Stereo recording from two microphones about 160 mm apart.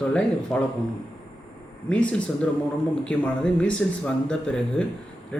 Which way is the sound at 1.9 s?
10° left (ahead or behind).